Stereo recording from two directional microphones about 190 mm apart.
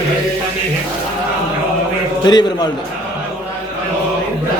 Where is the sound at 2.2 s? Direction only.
20° left (ahead or behind).